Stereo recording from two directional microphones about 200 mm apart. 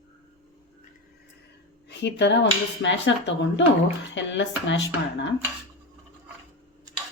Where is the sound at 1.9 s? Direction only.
60° left (ahead or behind).